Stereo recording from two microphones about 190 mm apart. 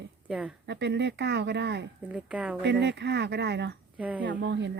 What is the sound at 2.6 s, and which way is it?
Speech, 65° right (ahead or behind).